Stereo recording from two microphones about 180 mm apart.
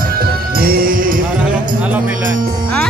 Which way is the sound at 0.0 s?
55° right (ahead or behind).